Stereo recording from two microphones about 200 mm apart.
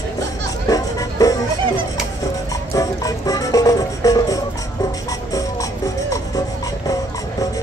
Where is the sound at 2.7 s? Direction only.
15° left (ahead or behind).